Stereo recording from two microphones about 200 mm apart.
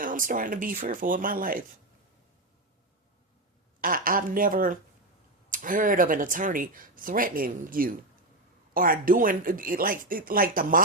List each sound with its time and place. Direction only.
0.0 s speech: 40° right (ahead or behind)
3.8 s speech: 45° right (ahead or behind)